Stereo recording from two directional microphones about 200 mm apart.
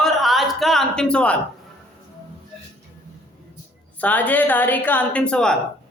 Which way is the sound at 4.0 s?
10° left (ahead or behind).